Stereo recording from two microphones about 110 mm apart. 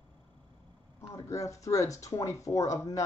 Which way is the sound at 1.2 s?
30° left (ahead or behind).